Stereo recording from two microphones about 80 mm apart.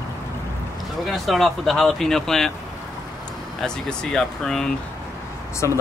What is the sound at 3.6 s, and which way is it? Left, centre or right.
Speech, centre.